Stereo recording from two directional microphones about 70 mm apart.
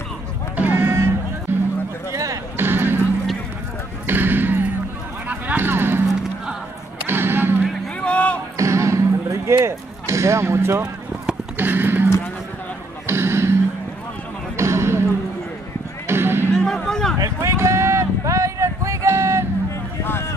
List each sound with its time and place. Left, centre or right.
0.6 s run: right
1.5 s music: right
2.5 s basketball bounce: right
4.1 s basketball bounce: right
5.3 s a sound: right
7.1 s music: right
8.0 s a sound: centre
8.5 s basketball bounce: right
11.5 s a sound: right
13.0 s music: right
14.6 s basketball bounce: right
16.1 s music: right
16.5 s music: centre
17.2 s a sound: right